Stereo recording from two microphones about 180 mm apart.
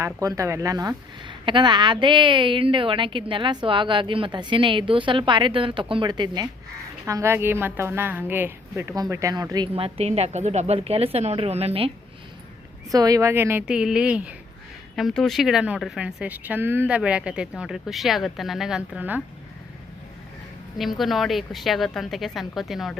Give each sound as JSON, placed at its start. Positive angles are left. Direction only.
{"t": 0.0, "sound": "a woman's voice", "side_deg": -20}
{"t": 12.9, "sound": "a woman's voice", "side_deg": -20}
{"t": 20.7, "sound": "speech", "side_deg": 0}